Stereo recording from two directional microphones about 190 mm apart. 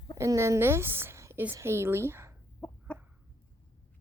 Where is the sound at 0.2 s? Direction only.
15° right (ahead or behind).